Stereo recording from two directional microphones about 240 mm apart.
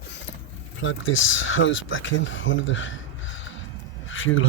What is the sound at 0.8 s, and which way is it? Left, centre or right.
Speech, left.